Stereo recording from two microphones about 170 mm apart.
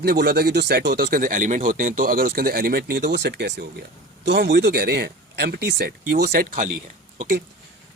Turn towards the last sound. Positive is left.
turn(degrees=-45)  # may be behind; listen again after turning